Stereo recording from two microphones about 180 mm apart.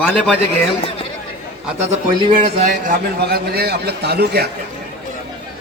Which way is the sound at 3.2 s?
60° right (ahead or behind).